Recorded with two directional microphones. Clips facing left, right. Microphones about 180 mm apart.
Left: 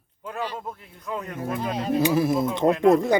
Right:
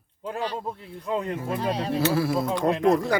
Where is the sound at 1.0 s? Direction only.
30° right (ahead or behind).